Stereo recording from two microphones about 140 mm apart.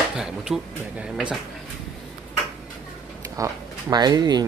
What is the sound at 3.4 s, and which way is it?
Speech, 30° right (ahead or behind).